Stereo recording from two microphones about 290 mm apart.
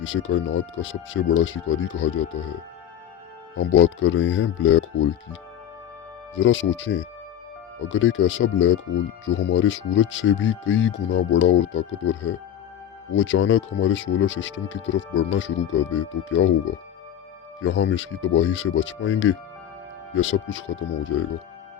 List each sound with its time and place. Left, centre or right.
0.0 s speech: left
3.6 s speech: left
6.3 s speech: left